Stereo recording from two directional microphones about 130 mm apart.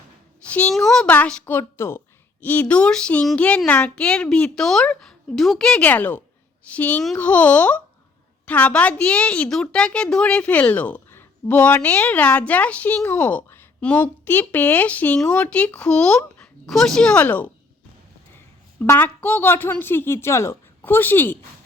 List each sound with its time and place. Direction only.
0.7 s a woman's voice: 5° left (ahead or behind)
18.8 s a woman's voice: 15° left (ahead or behind)